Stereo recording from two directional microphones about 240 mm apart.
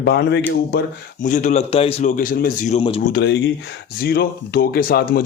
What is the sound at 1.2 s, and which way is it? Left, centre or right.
Speech, left.